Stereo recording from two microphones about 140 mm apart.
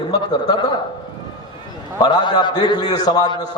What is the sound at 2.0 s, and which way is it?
A man's voice, 30° left (ahead or behind).